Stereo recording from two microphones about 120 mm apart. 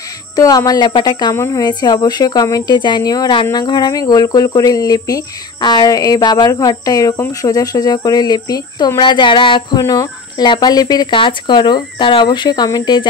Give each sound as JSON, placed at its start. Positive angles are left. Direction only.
{"t": 0.4, "sound": "speech", "side_deg": 30}
{"t": 1.3, "sound": "speech", "side_deg": 20}
{"t": 1.6, "sound": "speech", "side_deg": 35}